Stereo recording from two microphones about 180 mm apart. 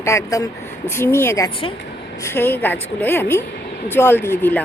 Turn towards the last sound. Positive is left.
turn(degrees=10)  # may be behind; listen again after turning